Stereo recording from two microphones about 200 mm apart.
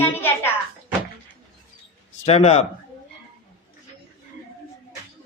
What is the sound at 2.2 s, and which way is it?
Speech, 30° left (ahead or behind).